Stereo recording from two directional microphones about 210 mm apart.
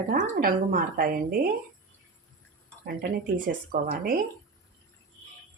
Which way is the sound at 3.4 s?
40° right (ahead or behind).